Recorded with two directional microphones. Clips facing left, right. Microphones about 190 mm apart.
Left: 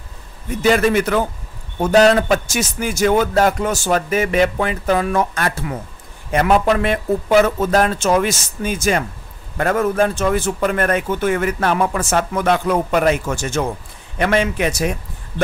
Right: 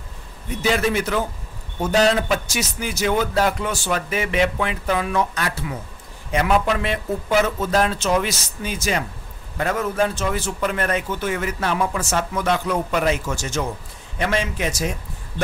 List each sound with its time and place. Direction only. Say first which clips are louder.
0.6 s a man's voice: left 6 dB; 55° left (ahead or behind)